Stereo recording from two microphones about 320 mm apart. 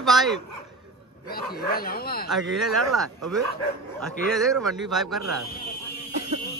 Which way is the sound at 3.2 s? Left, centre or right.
Right.